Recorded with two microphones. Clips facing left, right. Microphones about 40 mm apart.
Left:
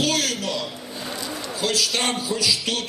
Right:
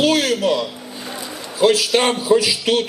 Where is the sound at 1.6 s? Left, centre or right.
Right.